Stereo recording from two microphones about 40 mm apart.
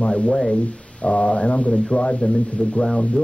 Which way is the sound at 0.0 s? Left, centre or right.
Left.